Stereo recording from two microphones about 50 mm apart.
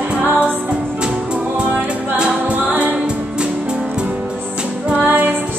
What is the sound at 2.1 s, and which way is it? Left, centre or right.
A capella, right.